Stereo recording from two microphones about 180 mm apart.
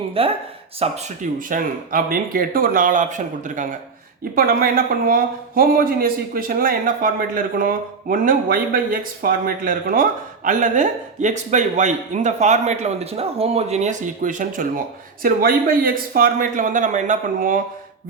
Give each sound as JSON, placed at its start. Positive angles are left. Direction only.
{"t": 0.2, "sound": "speech", "side_deg": -30}
{"t": 0.8, "sound": "speech", "side_deg": -45}